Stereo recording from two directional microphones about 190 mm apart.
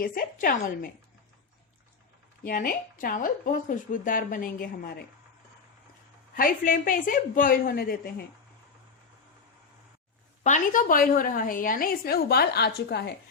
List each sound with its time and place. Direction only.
0.0 s a woman's voice: 50° left (ahead or behind)
2.4 s a woman's voice: 50° left (ahead or behind)
6.3 s a woman's voice: 45° left (ahead or behind)
10.4 s a woman's voice: 40° left (ahead or behind); by 13.1 s 60° left (ahead or behind)